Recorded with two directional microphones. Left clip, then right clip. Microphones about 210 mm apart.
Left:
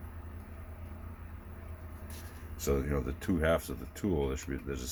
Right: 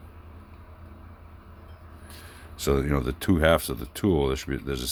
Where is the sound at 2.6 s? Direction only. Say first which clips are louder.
Right 7 dB; 55° right (ahead or behind).